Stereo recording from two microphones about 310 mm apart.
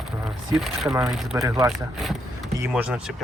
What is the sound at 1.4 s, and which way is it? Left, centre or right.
Speech, centre.